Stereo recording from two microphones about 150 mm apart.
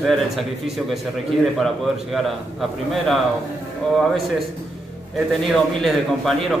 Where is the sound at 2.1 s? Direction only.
Centre (ahead or behind).